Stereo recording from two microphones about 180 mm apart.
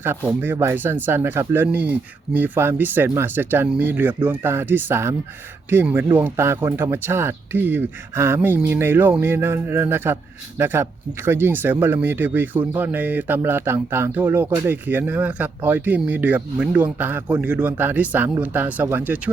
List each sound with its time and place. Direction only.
0.0 s speech: 10° right (ahead or behind)